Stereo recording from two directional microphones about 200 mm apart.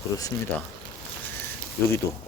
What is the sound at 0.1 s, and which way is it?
Speech, 20° left (ahead or behind).